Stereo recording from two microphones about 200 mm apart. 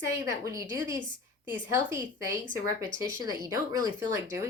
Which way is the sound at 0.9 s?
25° left (ahead or behind).